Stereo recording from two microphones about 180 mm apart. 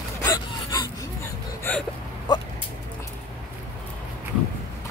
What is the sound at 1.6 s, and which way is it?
Hiccup, 10° left (ahead or behind).